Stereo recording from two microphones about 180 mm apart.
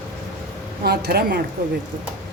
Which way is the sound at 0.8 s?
60° right (ahead or behind).